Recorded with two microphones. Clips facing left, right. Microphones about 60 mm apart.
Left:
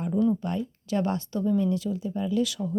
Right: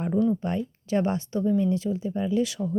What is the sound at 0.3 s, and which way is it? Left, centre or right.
Speech, right.